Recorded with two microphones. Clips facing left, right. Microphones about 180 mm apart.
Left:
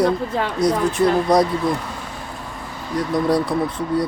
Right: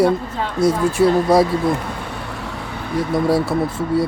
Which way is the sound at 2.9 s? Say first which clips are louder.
Right 1 dB; 5° right (ahead or behind).